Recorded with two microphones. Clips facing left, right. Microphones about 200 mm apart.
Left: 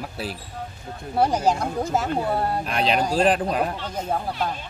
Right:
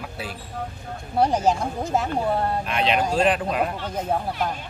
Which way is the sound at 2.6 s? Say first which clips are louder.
Even; 35° left (ahead or behind).